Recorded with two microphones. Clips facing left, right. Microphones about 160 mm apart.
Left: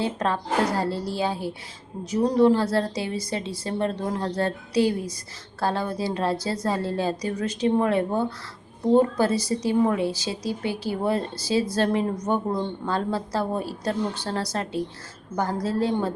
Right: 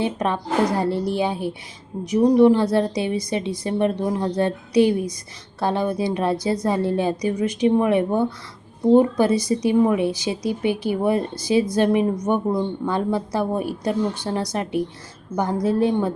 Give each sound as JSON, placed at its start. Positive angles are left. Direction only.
{"t": 0.0, "sound": "a woman's voice", "side_deg": -20}